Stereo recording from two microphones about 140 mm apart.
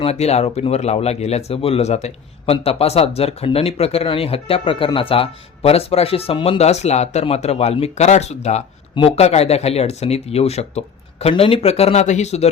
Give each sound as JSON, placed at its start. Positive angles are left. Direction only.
{"t": 0.0, "sound": "speech", "side_deg": 50}